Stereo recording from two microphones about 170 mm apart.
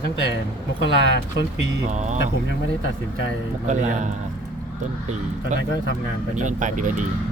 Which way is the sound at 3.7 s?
45° right (ahead or behind).